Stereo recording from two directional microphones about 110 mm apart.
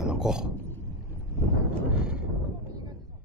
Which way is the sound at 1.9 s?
5° right (ahead or behind).